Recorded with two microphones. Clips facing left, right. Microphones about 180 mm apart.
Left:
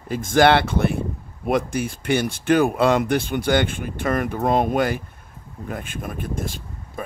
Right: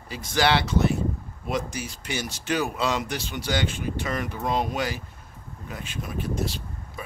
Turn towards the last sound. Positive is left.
turn(degrees=50)  # may be behind; listen again after turning